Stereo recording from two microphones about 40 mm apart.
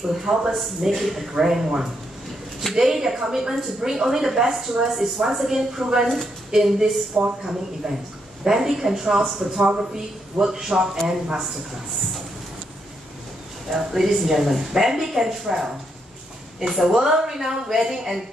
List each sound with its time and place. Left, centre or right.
0.0 s a woman's voice: centre
0.5 s a man's voice: centre
2.7 s a woman's voice: centre
8.5 s a woman's voice: centre
13.7 s a woman's voice: centre